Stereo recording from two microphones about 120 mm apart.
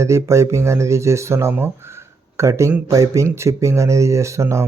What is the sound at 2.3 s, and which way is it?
Speech, 25° right (ahead or behind).